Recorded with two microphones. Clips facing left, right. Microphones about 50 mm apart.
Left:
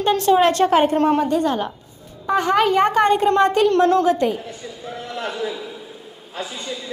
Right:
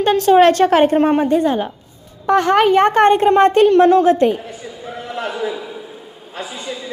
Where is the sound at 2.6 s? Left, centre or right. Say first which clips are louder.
Right 4 dB; right.